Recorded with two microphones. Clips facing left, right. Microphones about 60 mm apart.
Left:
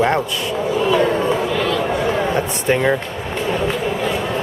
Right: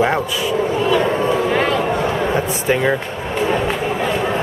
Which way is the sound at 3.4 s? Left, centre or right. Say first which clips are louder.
Right 2 dB; centre.